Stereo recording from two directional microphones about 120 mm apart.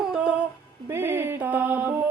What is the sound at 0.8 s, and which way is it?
Music, 20° right (ahead or behind).